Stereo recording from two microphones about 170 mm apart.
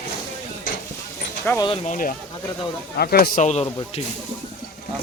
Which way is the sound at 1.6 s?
35° left (ahead or behind).